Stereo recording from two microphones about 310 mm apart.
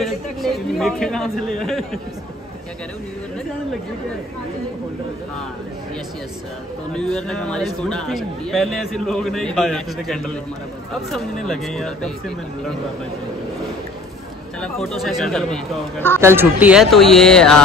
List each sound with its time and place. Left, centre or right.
0.0 s a man's voice: centre
6.9 s speech: centre
14.6 s speech: centre